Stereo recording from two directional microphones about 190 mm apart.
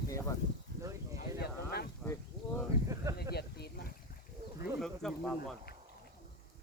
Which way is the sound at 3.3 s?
55° left (ahead or behind).